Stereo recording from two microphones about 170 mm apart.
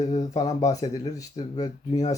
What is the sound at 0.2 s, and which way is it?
Speech, 20° left (ahead or behind).